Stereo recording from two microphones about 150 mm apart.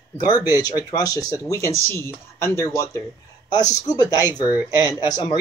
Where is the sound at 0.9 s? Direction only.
25° left (ahead or behind).